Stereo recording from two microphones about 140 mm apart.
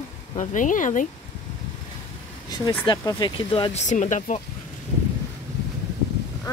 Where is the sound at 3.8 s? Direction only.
60° left (ahead or behind).